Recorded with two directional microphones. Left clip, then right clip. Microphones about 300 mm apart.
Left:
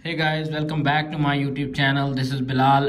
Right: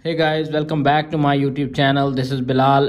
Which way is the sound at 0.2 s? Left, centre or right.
Centre.